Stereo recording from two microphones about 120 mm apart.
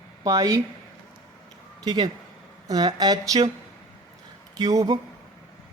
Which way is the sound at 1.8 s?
35° right (ahead or behind).